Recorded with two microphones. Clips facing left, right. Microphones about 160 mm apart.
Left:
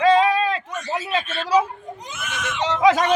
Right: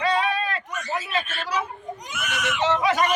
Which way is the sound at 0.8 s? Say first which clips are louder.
Left 2 dB; 30° left (ahead or behind).